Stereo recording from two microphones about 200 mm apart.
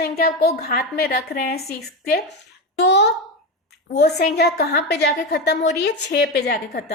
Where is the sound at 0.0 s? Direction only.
50° left (ahead or behind).